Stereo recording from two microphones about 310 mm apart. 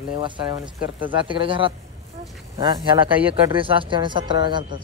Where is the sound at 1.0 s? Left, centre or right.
Centre.